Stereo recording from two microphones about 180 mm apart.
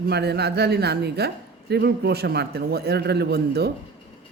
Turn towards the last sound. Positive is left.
turn(degrees=-60)  # may be behind; listen again after turning